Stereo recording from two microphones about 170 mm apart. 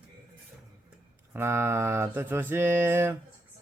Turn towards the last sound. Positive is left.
turn(degrees=-15)  # may be behind; listen again after turning